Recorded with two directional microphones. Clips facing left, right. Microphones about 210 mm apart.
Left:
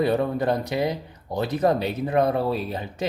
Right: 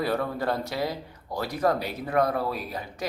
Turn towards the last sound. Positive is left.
turn(degrees=25)  # may be behind; listen again after turning